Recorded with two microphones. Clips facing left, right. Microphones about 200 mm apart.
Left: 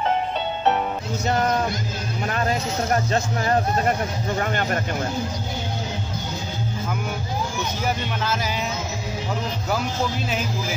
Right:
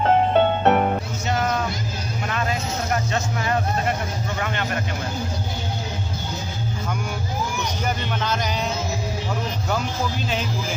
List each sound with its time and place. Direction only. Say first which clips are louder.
0.3 s music: right 6 dB; 55° right (ahead or behind)
2.9 s speech: left 2 dB; 40° left (ahead or behind)